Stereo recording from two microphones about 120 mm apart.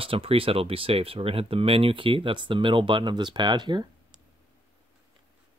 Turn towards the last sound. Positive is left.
turn(degrees=-40)  # may be behind; listen again after turning